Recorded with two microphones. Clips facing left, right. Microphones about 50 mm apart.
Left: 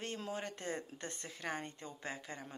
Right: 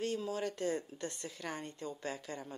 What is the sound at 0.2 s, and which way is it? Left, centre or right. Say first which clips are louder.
A woman's voice: right 5 dB; left.